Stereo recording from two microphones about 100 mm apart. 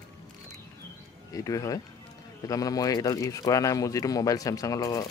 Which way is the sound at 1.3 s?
35° left (ahead or behind).